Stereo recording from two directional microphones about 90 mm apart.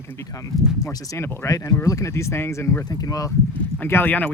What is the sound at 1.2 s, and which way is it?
Speech, 40° left (ahead or behind).